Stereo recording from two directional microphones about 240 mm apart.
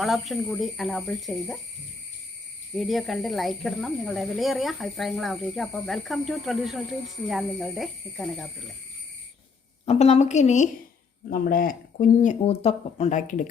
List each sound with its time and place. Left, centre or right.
0.0 s speech: centre
2.7 s speech: centre
9.8 s a woman's voice: left